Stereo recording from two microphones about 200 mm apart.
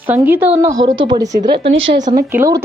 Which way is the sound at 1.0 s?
20° right (ahead or behind).